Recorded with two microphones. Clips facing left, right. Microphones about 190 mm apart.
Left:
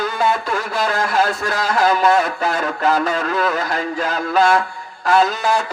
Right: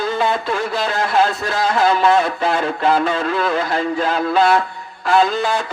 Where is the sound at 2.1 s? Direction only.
30° right (ahead or behind).